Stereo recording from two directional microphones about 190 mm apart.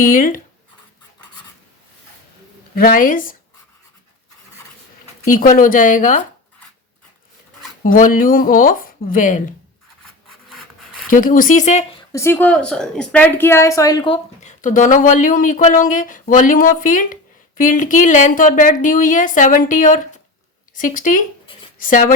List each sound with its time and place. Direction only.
0.0 s speech: 45° left (ahead or behind)
2.7 s speech: 45° left (ahead or behind)
5.3 s speech: 45° left (ahead or behind)
7.9 s speech: 45° left (ahead or behind)
11.1 s speech: 45° left (ahead or behind)
12.1 s a woman's voice: 15° left (ahead or behind)
14.4 s speech: 45° left (ahead or behind)